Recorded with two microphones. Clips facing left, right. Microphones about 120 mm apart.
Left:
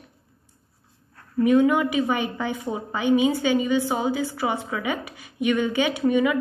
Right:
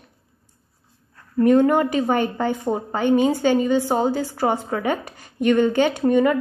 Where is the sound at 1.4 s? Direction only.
50° right (ahead or behind).